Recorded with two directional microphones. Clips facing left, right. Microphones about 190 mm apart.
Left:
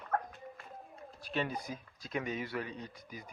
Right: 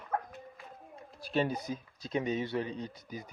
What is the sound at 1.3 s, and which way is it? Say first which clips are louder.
Speech: right 5 dB; 30° right (ahead or behind).